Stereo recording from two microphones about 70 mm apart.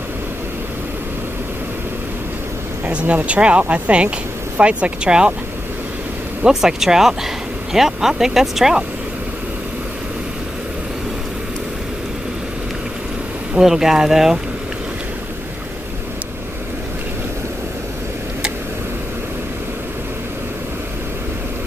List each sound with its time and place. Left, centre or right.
2.8 s speech: centre
6.4 s speech: centre
13.6 s speech: centre